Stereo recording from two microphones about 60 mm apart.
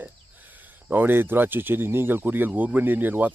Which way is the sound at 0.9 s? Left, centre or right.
Right.